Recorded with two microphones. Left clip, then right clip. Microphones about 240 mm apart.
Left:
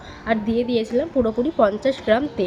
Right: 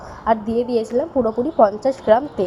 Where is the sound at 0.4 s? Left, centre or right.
Left.